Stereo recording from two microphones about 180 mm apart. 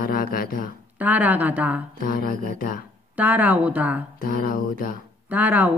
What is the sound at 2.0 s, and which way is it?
Speech, 55° left (ahead or behind).